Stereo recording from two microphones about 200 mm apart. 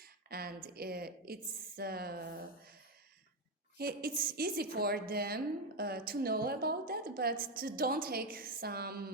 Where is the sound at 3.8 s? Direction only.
50° right (ahead or behind).